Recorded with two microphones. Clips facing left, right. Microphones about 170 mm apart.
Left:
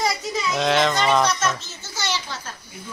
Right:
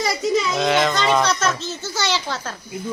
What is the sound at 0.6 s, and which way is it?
Speech, centre (ahead or behind).